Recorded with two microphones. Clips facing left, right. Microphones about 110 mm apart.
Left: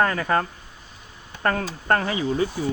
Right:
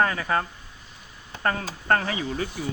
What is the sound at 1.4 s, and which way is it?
Speech, 45° left (ahead or behind).